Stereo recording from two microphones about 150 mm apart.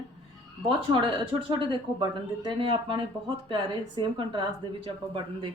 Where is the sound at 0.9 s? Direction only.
35° right (ahead or behind).